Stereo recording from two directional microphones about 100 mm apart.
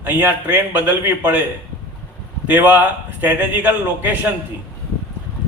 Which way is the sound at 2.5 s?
15° right (ahead or behind).